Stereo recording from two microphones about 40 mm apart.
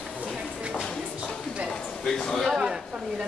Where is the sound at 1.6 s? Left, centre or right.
Left.